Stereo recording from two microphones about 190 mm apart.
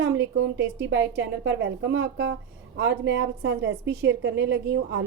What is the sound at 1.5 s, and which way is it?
A woman's voice, 70° right (ahead or behind).